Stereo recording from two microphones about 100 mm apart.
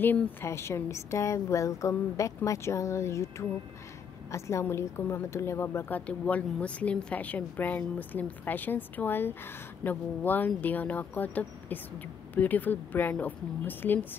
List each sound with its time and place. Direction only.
0.0 s a woman's voice: 20° left (ahead or behind)